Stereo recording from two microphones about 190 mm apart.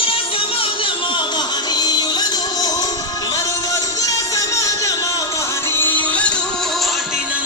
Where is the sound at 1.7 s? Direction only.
20° left (ahead or behind).